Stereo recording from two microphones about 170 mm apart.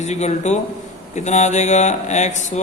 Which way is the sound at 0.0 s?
40° left (ahead or behind).